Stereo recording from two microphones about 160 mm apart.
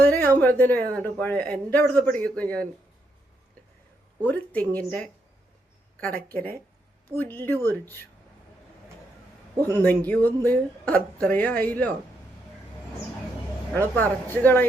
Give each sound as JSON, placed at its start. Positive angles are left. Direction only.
{"t": 0.0, "sound": "a woman's voice", "side_deg": 15}
{"t": 4.2, "sound": "speech", "side_deg": 10}
{"t": 6.3, "sound": "speech", "side_deg": 10}
{"t": 9.6, "sound": "a man's voice", "side_deg": -20}
{"t": 10.1, "sound": "speech", "side_deg": 10}
{"t": 13.7, "sound": "speech", "side_deg": 10}